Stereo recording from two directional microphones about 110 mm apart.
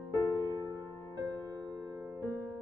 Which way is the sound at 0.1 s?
35° right (ahead or behind).